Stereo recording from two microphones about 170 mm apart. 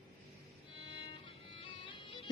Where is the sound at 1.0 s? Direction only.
30° left (ahead or behind).